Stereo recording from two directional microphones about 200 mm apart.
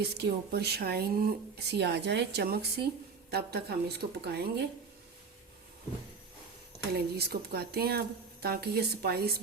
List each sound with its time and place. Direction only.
0.0 s speech: 55° right (ahead or behind)
6.9 s speech: 50° right (ahead or behind)